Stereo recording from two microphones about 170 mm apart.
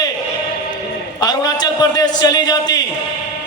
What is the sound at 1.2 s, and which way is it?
A man's voice, 25° left (ahead or behind).